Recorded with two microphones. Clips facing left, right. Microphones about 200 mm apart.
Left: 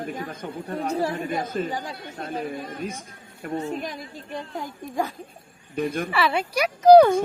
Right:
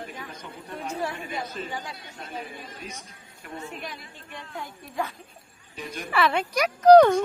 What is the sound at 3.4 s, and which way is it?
Speech, 40° left (ahead or behind).